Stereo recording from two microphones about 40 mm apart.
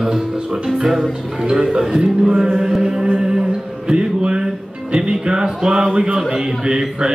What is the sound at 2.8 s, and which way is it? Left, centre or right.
Mantra, right.